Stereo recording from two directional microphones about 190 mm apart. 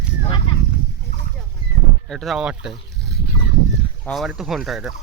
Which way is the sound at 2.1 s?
Centre (ahead or behind).